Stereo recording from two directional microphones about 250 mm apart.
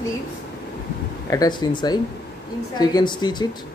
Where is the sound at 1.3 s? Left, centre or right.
Centre.